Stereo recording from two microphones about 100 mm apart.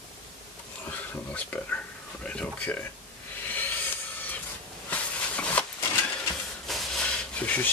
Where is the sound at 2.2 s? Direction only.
10° left (ahead or behind).